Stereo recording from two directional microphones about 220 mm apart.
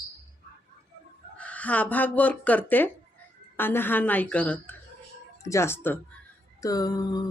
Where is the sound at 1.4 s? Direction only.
5° left (ahead or behind).